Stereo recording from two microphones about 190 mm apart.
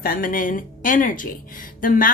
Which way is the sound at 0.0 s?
50° left (ahead or behind).